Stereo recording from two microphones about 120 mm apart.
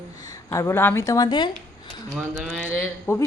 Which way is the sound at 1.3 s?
40° left (ahead or behind).